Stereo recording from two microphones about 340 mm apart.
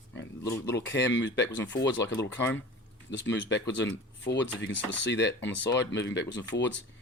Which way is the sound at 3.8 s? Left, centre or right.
Left.